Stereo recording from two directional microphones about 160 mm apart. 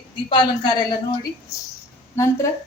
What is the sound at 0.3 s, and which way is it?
A woman's voice, 30° left (ahead or behind).